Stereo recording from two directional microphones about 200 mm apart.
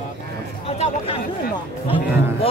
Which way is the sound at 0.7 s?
30° left (ahead or behind).